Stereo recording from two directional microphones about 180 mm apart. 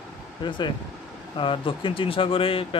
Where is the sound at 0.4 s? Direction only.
25° left (ahead or behind).